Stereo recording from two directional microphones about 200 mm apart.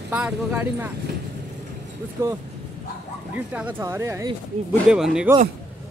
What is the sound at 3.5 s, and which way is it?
Speech, 10° right (ahead or behind).